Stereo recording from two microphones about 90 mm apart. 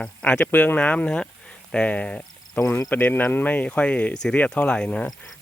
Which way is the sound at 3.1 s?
20° left (ahead or behind).